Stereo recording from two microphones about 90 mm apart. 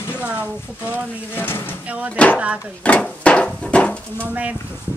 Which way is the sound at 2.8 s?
15° left (ahead or behind).